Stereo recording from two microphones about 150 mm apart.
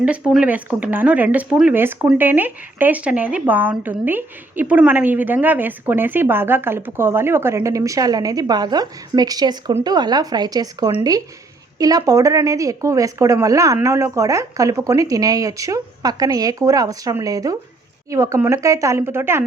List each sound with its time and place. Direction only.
0.0 s speech: 10° right (ahead or behind)